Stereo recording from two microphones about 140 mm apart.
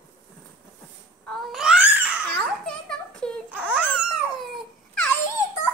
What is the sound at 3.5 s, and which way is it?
Dog, 10° right (ahead or behind).